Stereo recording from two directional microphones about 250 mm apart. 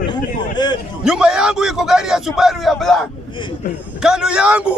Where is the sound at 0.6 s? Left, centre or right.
Centre.